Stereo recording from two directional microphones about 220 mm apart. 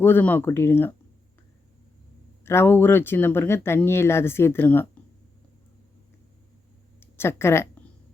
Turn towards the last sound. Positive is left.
turn(degrees=10)  # may be behind; listen again after turning